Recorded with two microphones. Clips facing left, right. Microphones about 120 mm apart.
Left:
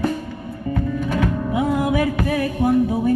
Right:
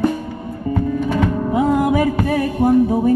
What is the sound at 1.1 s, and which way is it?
Music, 40° right (ahead or behind).